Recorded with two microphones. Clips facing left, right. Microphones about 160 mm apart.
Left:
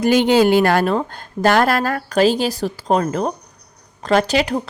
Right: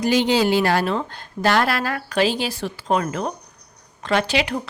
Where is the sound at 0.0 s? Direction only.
55° left (ahead or behind).